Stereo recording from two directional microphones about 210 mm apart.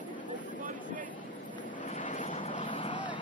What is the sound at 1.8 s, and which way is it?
Vehicle, 35° left (ahead or behind).